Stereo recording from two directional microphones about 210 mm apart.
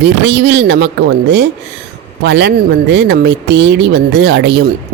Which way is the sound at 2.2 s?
55° right (ahead or behind).